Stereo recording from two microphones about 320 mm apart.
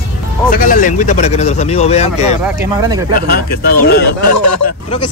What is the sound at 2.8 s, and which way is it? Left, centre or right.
Speech, centre.